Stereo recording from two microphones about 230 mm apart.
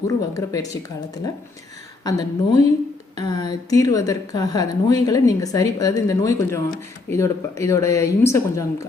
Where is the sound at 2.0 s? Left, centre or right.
Centre.